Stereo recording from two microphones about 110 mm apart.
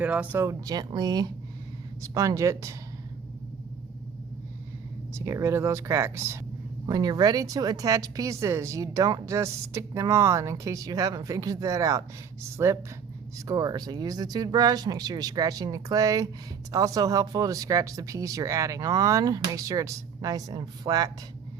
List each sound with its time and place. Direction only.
0.0 s speech: 10° right (ahead or behind)
0.3 s a woman's voice: 30° right (ahead or behind)
5.1 s speech: 25° right (ahead or behind)
6.8 s a woman's voice: 35° right (ahead or behind)